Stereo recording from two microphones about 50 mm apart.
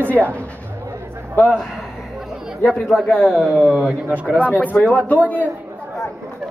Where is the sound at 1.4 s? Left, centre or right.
Left.